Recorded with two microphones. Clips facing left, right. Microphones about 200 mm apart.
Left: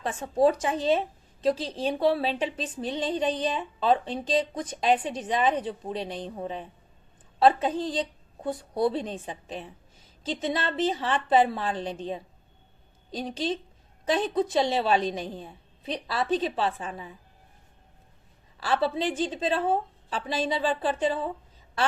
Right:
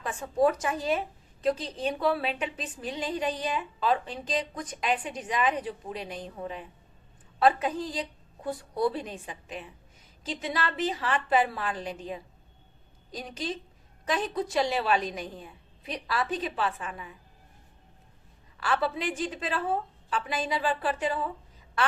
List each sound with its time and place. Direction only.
0.0 s a woman's voice: 30° left (ahead or behind)
18.6 s a woman's voice: 30° left (ahead or behind)